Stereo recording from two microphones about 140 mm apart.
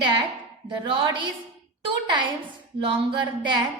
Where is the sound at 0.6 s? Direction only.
35° right (ahead or behind).